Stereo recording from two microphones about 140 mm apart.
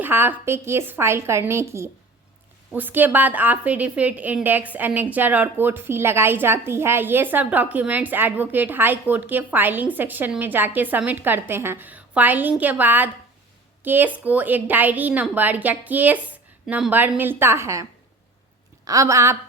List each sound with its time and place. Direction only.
0.0 s a woman's voice: 15° right (ahead or behind)
18.9 s a woman's voice: 25° right (ahead or behind)